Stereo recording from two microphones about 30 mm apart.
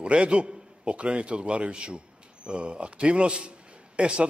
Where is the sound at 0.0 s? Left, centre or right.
Right.